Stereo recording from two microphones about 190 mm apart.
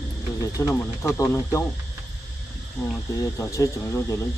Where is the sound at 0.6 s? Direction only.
15° left (ahead or behind).